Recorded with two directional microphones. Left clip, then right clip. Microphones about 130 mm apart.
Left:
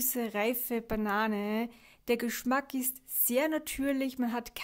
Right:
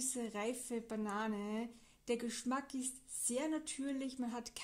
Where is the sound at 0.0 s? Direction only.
25° left (ahead or behind).